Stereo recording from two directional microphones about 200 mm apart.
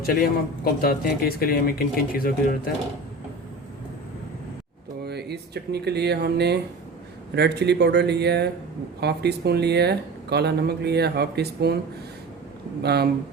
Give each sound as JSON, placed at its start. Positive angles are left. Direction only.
{"t": 0.0, "sound": "speech", "side_deg": 50}
{"t": 5.0, "sound": "speech", "side_deg": -55}
{"t": 12.8, "sound": "speech", "side_deg": -55}